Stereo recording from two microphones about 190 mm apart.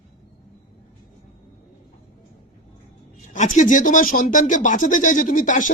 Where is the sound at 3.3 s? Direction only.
40° left (ahead or behind).